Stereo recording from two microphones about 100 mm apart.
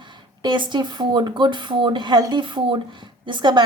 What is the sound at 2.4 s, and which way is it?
A woman's voice, 55° right (ahead or behind).